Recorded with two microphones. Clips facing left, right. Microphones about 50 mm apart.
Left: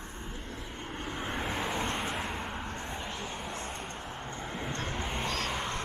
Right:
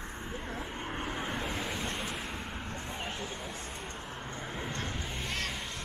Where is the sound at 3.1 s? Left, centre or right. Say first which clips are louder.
Left 1 dB; centre.